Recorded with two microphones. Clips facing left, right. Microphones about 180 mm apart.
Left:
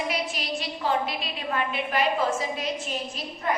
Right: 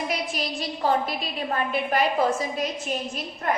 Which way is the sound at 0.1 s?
45° right (ahead or behind).